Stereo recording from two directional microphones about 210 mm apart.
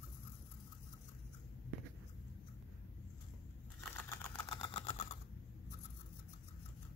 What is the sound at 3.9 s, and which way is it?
Engine, 10° left (ahead or behind).